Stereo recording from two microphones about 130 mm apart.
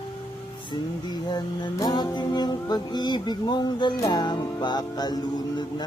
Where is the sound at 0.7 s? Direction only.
30° left (ahead or behind).